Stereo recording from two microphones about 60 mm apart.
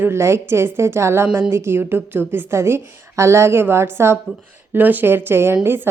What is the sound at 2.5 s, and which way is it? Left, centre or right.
A woman's voice, right.